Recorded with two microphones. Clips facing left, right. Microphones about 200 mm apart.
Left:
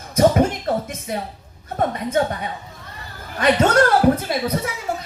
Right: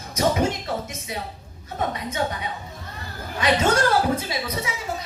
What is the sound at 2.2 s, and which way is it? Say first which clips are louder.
Speech: left 7 dB; 50° left (ahead or behind).